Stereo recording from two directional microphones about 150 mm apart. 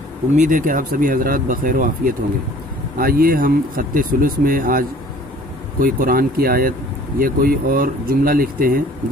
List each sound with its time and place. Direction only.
0.3 s speech: 60° right (ahead or behind)